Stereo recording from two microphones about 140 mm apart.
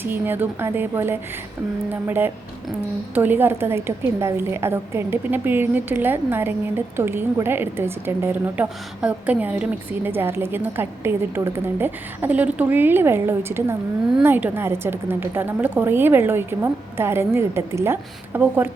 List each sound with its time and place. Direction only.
0.0 s a woman's voice: 15° right (ahead or behind)